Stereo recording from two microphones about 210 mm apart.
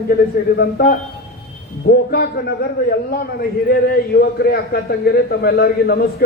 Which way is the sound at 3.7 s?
45° left (ahead or behind).